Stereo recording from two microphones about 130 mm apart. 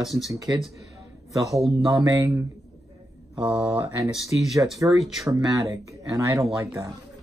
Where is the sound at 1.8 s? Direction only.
25° right (ahead or behind).